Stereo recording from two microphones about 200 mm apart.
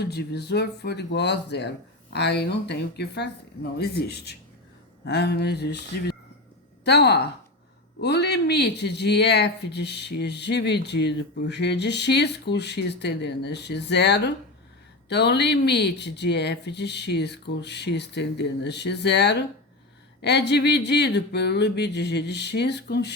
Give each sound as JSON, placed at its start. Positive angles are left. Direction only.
{"t": 0.0, "sound": "speech", "side_deg": 55}